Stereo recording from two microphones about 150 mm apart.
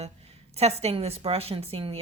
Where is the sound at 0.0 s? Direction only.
45° right (ahead or behind).